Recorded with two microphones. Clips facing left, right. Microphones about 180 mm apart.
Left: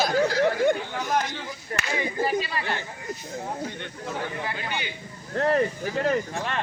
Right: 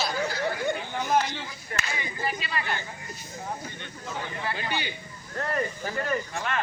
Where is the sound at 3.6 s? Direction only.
65° left (ahead or behind).